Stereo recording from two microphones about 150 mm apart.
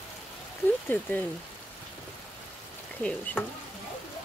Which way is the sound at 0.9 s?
10° left (ahead or behind).